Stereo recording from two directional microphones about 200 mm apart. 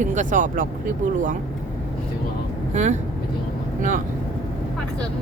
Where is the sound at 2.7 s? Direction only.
35° right (ahead or behind).